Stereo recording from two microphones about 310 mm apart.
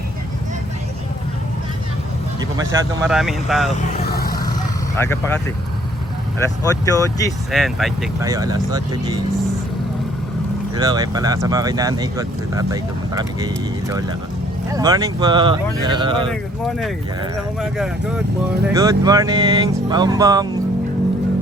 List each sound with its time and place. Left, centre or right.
2.4 s speech: centre
3.1 s speech: centre
3.8 s vehicle: left
4.9 s speech: centre
6.4 s speech: centre
7.5 s speech: centre
8.2 s speech: centre
10.8 s speech: centre
16.2 s speech: centre